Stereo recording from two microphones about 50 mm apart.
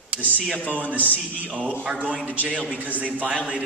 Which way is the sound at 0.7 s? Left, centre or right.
Right.